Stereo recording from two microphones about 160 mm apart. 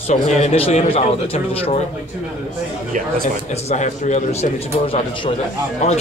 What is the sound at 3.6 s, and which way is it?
A man's voice, 45° left (ahead or behind).